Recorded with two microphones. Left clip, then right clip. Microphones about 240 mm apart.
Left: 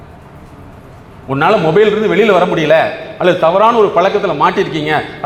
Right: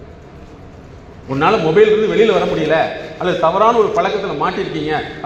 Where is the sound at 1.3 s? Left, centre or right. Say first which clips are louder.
Left 3 dB; left.